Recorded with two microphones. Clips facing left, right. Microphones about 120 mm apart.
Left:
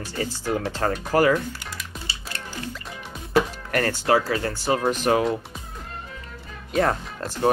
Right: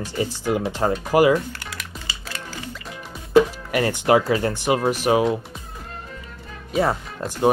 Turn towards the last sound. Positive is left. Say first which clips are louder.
# right 3 dB
turn(degrees=-10)  # may be behind; listen again after turning